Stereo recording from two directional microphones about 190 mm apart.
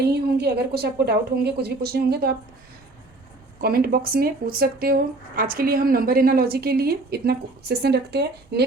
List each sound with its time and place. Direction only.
0.0 s a woman's voice: 60° right (ahead or behind)
3.6 s speech: 50° right (ahead or behind)